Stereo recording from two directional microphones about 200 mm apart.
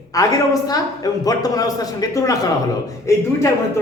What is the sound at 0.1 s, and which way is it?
Speech, 20° left (ahead or behind).